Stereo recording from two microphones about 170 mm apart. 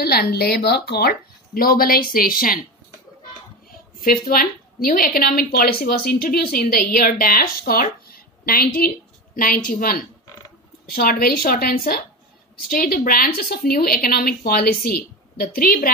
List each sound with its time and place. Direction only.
0.0 s a woman's voice: 70° left (ahead or behind)
4.0 s a woman's voice: 60° left (ahead or behind)